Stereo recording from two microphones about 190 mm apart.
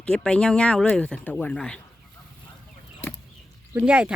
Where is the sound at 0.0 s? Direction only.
5° left (ahead or behind).